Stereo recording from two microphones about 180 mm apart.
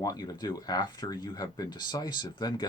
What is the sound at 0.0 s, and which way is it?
Speech, 20° left (ahead or behind).